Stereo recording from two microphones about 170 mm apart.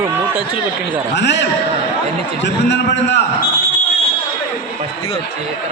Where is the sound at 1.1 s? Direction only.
90° left.